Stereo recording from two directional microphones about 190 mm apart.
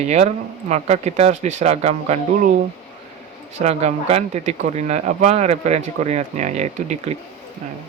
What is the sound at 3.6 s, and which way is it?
Speech, 35° right (ahead or behind).